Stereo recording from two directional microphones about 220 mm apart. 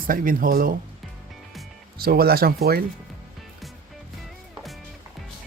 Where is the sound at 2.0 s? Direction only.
45° right (ahead or behind).